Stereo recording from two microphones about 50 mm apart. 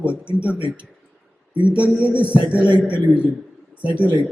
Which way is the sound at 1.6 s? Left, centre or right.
Right.